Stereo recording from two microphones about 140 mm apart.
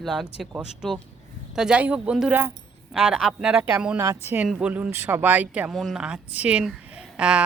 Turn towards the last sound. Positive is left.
turn(degrees=-10)  # may be behind; listen again after turning